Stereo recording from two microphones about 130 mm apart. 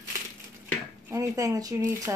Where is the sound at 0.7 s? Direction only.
20° right (ahead or behind).